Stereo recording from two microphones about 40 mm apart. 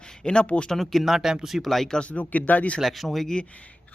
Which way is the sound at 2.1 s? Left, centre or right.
Left.